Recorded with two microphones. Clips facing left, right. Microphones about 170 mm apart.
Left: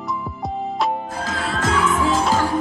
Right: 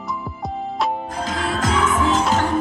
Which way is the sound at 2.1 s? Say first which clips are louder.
Even; 10° left (ahead or behind).